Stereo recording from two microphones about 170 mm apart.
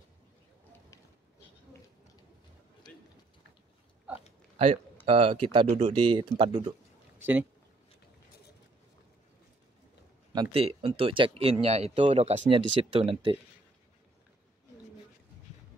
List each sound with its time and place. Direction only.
5.0 s speech: 30° right (ahead or behind)
7.2 s speech: 10° right (ahead or behind)
10.3 s speech: 30° right (ahead or behind)